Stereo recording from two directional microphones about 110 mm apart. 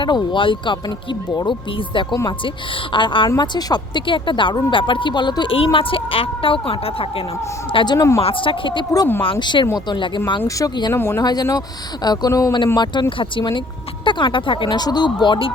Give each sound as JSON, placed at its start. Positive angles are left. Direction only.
{"t": 0.0, "sound": "speech", "side_deg": 45}
{"t": 7.9, "sound": "speech", "side_deg": 25}
{"t": 8.2, "sound": "speech", "side_deg": 55}
{"t": 10.9, "sound": "speech", "side_deg": 20}
{"t": 11.2, "sound": "speech", "side_deg": 35}